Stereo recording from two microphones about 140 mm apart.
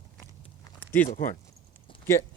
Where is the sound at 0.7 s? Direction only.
15° left (ahead or behind).